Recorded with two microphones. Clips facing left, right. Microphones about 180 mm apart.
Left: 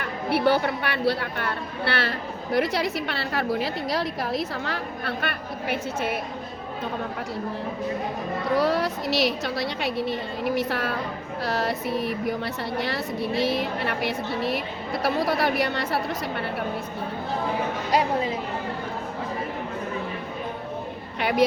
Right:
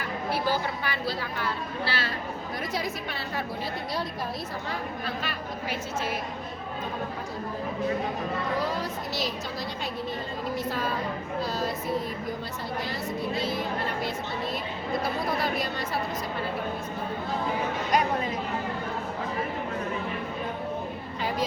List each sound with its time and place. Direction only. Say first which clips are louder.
0.0 s a woman's voice: left 6 dB; 65° left (ahead or behind)
8.5 s a woman's voice: left 7 dB; 75° left (ahead or behind)
21.2 s a sound: left 7 dB; 75° left (ahead or behind)